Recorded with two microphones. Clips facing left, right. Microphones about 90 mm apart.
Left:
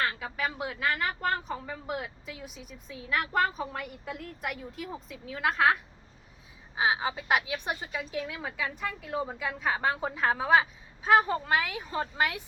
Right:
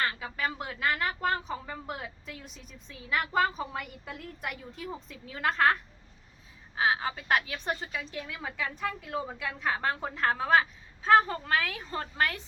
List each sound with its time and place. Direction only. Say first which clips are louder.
0.0 s speech: left 1 dB; centre (ahead or behind)
6.7 s a woman's voice: even; 10° left (ahead or behind)